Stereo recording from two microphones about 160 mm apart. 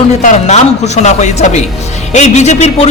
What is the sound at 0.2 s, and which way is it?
Speech, 45° left (ahead or behind).